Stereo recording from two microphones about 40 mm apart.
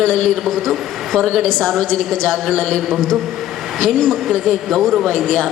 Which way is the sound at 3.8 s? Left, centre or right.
Centre.